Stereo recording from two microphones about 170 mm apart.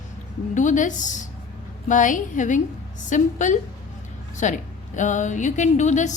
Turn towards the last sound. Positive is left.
turn(degrees=45)  # may be behind; listen again after turning